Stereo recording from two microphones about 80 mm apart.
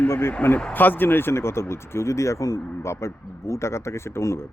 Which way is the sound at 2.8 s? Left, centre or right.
Left.